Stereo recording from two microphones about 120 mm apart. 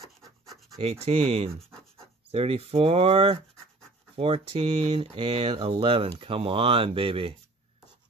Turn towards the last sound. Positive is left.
turn(degrees=-50)  # may be behind; listen again after turning